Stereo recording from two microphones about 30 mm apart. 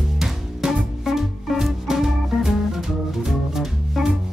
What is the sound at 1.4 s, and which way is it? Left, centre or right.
Music, centre.